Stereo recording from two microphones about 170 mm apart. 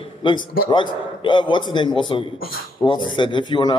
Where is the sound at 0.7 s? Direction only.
30° left (ahead or behind).